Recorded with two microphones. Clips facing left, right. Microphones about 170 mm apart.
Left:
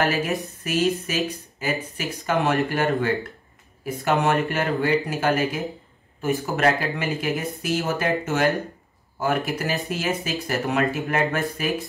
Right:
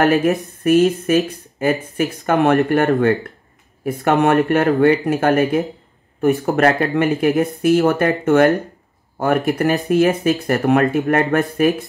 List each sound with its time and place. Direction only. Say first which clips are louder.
0.0 s speech: right 8 dB; 55° right (ahead or behind)